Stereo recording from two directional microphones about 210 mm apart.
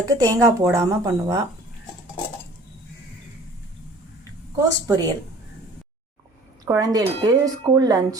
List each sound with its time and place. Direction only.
0.0 s speech: 15° right (ahead or behind)
4.5 s speech: 15° right (ahead or behind)
6.7 s speech: 15° right (ahead or behind)